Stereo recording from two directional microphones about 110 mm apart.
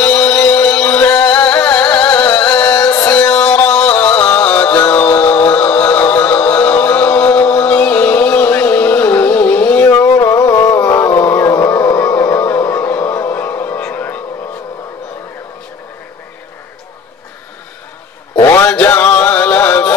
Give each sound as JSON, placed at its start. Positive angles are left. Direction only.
{"t": 0.0, "sound": "music", "side_deg": 10}
{"t": 9.8, "sound": "a sound", "side_deg": 25}
{"t": 10.8, "sound": "music", "side_deg": 20}
{"t": 18.7, "sound": "music", "side_deg": 15}